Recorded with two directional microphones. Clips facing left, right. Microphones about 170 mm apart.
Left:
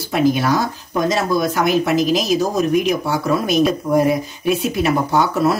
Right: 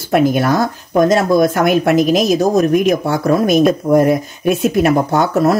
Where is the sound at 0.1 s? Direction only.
55° right (ahead or behind).